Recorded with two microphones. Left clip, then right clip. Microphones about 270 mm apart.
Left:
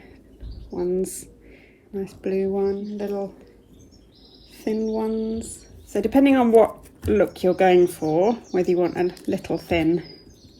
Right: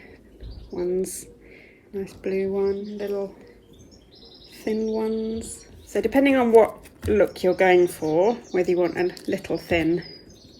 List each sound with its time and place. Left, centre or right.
0.7 s speech: centre
4.5 s speech: centre